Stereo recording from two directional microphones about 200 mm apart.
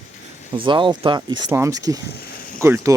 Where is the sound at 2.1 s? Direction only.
50° left (ahead or behind).